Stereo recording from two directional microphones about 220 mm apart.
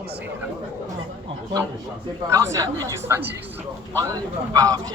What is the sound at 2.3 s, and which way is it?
A man's voice, 15° right (ahead or behind).